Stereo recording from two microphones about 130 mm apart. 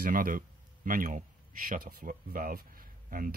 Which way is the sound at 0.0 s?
90° right.